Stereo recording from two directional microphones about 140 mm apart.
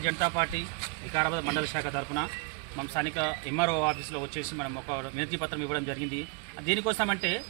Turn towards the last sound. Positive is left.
turn(degrees=15)  # may be behind; listen again after turning